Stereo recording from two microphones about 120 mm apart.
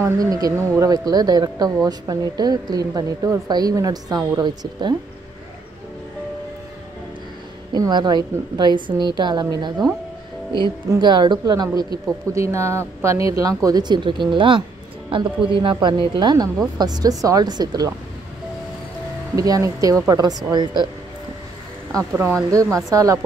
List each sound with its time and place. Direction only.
0.0 s speech: 30° right (ahead or behind)
7.7 s speech: 35° right (ahead or behind)
10.9 s speech: 40° right (ahead or behind)
19.3 s speech: 30° right (ahead or behind)
22.1 s speech: 15° right (ahead or behind)
22.5 s speech: 30° right (ahead or behind)